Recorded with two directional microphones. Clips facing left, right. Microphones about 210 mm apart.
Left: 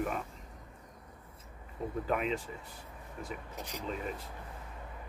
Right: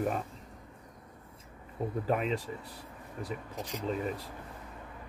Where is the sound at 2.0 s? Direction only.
35° right (ahead or behind).